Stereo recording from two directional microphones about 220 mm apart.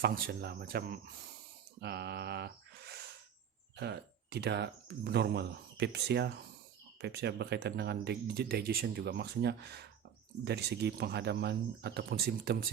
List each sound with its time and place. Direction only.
0.0 s speech: 45° right (ahead or behind)
1.8 s a sound: 50° right (ahead or behind)
3.8 s speech: 50° right (ahead or behind)